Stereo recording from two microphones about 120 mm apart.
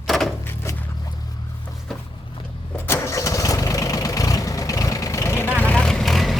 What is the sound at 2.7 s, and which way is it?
Engine starting, 25° left (ahead or behind).